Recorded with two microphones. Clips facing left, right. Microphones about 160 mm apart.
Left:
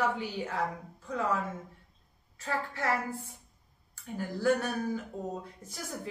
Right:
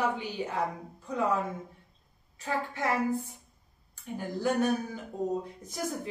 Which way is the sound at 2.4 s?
15° right (ahead or behind).